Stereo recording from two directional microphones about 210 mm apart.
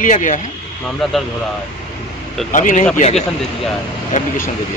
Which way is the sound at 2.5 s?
35° left (ahead or behind).